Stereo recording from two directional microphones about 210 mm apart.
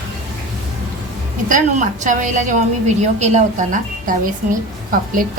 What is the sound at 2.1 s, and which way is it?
A woman's voice, 35° right (ahead or behind).